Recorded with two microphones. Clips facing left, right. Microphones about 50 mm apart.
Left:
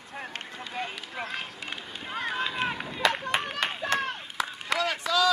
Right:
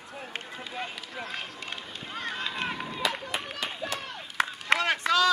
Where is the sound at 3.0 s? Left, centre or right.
Left.